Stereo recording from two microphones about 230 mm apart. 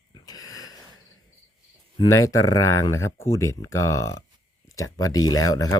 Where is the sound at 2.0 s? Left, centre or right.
Centre.